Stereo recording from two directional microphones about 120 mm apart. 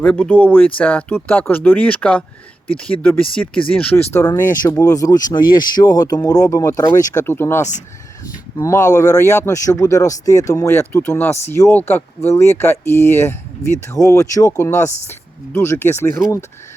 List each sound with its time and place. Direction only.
0.0 s speech: 10° left (ahead or behind)